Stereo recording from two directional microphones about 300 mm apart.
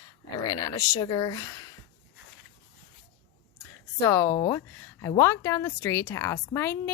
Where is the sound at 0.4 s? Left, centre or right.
Centre.